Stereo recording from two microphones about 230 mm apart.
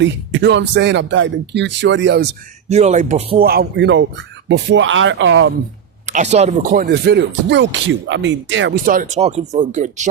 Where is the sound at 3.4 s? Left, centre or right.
Right.